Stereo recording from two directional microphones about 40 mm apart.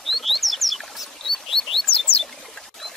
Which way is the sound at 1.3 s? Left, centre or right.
Centre.